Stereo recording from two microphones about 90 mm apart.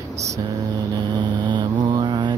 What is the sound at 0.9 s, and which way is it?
Vehicle, 60° right (ahead or behind).